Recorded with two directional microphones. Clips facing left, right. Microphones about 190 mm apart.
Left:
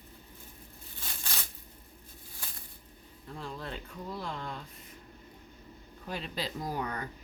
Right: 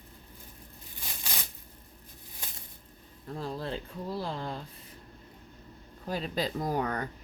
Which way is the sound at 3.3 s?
35° right (ahead or behind).